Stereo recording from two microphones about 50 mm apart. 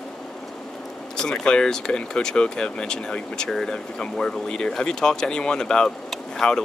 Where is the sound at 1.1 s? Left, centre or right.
Centre.